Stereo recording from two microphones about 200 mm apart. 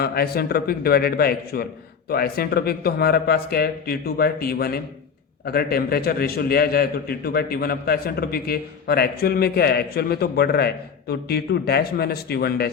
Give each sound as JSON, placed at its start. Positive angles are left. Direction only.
{"t": 0.0, "sound": "a man's voice", "side_deg": 50}